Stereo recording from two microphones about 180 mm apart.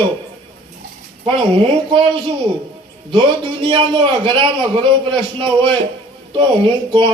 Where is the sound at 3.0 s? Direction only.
25° right (ahead or behind).